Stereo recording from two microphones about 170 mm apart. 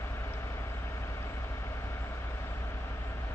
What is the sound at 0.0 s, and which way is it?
Vehicle, 15° left (ahead or behind).